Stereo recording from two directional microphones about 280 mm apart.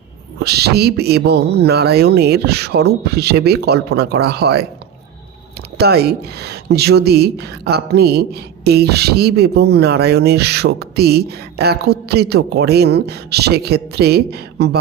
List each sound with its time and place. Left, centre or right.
0.4 s speech: right
5.7 s speech: right